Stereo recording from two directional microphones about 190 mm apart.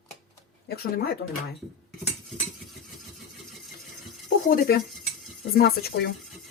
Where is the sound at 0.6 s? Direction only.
55° left (ahead or behind).